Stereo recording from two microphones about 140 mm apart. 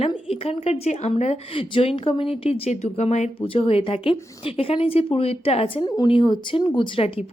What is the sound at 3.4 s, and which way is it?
A woman's voice, 40° left (ahead or behind).